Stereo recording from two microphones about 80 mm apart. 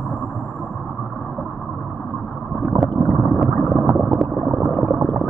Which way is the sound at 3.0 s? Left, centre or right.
Centre.